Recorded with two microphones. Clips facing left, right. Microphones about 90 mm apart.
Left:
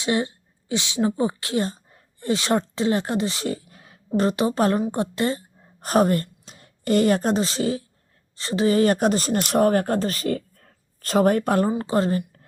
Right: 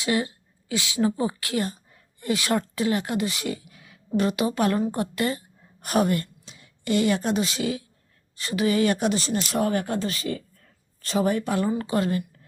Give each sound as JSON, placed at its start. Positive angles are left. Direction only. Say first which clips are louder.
{"t": 0.0, "sound": "a woman's voice", "louder": "left 2 dB", "side_deg": 25}
{"t": 9.4, "sound": "speech", "louder": "left 9 dB", "side_deg": 60}
{"t": 11.7, "sound": "speech", "louder": "left 3 dB", "side_deg": 30}